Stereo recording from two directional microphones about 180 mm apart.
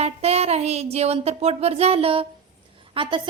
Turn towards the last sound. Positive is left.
turn(degrees=-25)  # may be behind; listen again after turning